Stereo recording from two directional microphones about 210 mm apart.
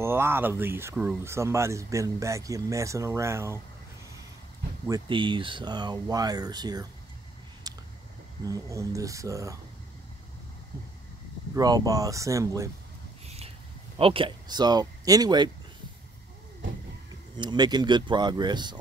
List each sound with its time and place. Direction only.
0.0 s speech: 10° right (ahead or behind)
4.8 s speech: 20° right (ahead or behind)
7.7 s a sound: 20° right (ahead or behind)
8.5 s speech: 15° right (ahead or behind)
11.5 s speech: 15° right (ahead or behind)
13.9 s speech: 25° right (ahead or behind)
17.4 s speech: 20° right (ahead or behind)